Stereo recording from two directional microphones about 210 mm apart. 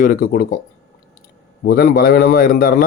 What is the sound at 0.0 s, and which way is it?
Speech, 40° left (ahead or behind).